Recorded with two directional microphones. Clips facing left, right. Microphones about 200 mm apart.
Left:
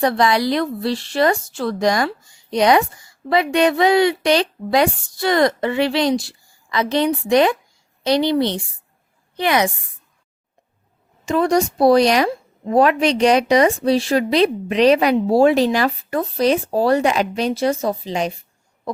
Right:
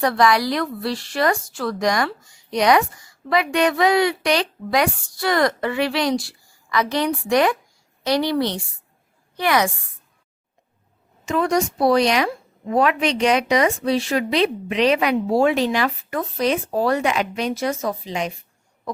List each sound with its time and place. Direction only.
0.0 s a woman's voice: 25° left (ahead or behind)
11.3 s a woman's voice: 35° left (ahead or behind)